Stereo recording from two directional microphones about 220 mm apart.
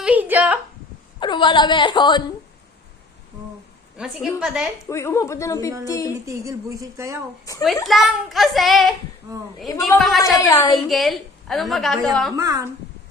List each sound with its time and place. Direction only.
0.0 s a sound: 5° right (ahead or behind)
1.2 s a woman's voice: 20° left (ahead or behind)
3.9 s a woman's voice: 5° right (ahead or behind)
4.9 s a woman's voice: 10° left (ahead or behind)
6.2 s a woman's voice: 15° right (ahead or behind)
7.5 s a woman's voice: 15° left (ahead or behind)
7.9 s a woman's voice: centre (ahead or behind)
10.0 s a woman's voice: centre (ahead or behind)
10.3 s a woman's voice: 15° left (ahead or behind)
10.7 s a woman's voice: centre (ahead or behind)
12.4 s a woman's voice: 15° right (ahead or behind)